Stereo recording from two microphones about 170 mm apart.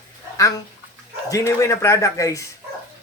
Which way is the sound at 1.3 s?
15° left (ahead or behind).